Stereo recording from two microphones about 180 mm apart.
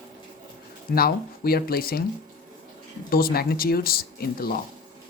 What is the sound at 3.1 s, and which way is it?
Speech, 55° left (ahead or behind).